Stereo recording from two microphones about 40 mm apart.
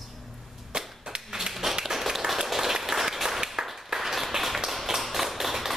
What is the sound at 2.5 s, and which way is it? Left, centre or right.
Applause, centre.